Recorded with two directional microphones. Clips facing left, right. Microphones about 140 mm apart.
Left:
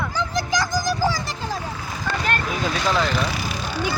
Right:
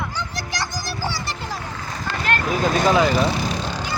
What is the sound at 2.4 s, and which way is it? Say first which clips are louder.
Vehicle: right 5 dB; 50° right (ahead or behind).